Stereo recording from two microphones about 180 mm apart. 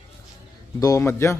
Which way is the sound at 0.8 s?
15° left (ahead or behind).